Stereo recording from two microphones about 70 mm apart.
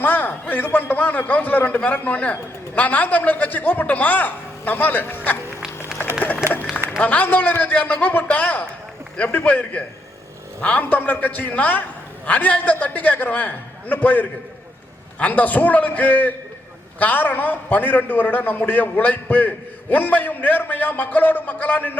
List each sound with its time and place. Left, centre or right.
0.0 s a man's voice: left
6.4 s run: left
7.0 s a man's voice: left